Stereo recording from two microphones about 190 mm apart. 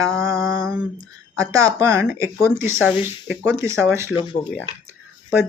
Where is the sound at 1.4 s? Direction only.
15° right (ahead or behind).